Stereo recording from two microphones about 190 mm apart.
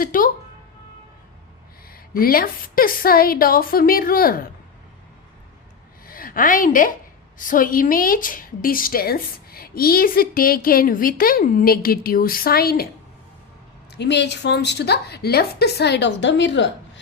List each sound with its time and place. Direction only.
0.0 s speech: 45° left (ahead or behind)
1.9 s speech: 50° left (ahead or behind)
6.1 s a woman's voice: 50° left (ahead or behind)
13.9 s a woman's voice: 60° left (ahead or behind)